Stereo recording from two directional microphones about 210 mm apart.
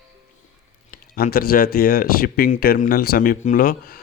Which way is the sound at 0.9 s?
45° left (ahead or behind).